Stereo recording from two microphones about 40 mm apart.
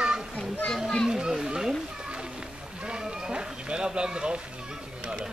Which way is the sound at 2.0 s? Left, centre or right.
Right.